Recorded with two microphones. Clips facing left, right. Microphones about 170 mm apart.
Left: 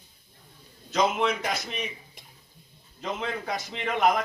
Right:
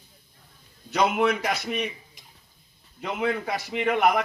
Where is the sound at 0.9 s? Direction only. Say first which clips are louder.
Right 2 dB; 60° right (ahead or behind).